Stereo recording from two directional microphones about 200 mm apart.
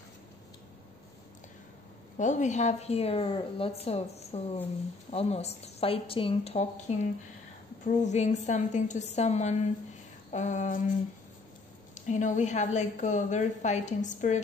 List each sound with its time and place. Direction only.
2.1 s a woman's voice: 40° left (ahead or behind)
11.9 s a woman's voice: 35° left (ahead or behind)